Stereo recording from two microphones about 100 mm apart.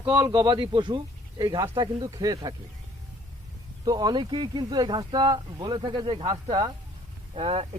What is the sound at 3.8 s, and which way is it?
Speech, 40° right (ahead or behind).